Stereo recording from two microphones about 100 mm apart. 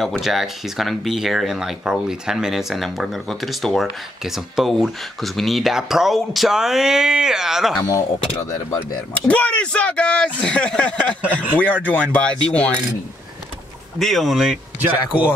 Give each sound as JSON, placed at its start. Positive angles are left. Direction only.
{"t": 0.0, "sound": "speech", "side_deg": 0}
{"t": 8.7, "sound": "speech", "side_deg": 15}
{"t": 13.9, "sound": "speech", "side_deg": 0}
{"t": 14.8, "sound": "a man's voice", "side_deg": -15}